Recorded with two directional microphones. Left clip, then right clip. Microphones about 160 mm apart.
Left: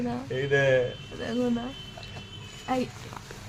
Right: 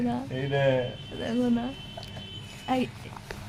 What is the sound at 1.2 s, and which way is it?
A woman's voice, 10° right (ahead or behind).